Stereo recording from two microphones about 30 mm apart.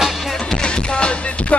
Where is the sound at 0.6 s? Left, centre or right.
Left.